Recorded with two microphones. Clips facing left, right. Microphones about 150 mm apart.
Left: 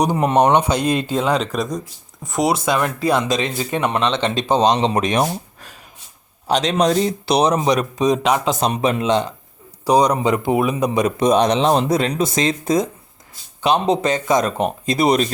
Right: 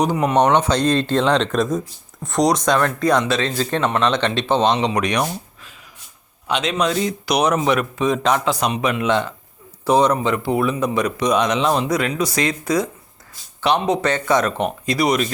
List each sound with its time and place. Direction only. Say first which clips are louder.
0.5 s speech: even; 10° left (ahead or behind)
4.4 s speech: left 4 dB; 40° left (ahead or behind)
4.9 s speech: left 2 dB; 25° left (ahead or behind)
5.3 s a sound: left 3 dB; 40° left (ahead or behind)
6.5 s speech: left 3 dB; 35° left (ahead or behind); by 11.1 s 15° left (ahead or behind)
11.3 s speech: left 3 dB; 35° left (ahead or behind)